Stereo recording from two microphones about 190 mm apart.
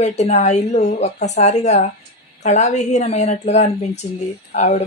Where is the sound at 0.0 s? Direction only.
35° left (ahead or behind).